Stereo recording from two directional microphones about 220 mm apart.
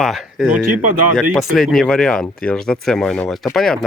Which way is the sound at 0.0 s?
Centre (ahead or behind).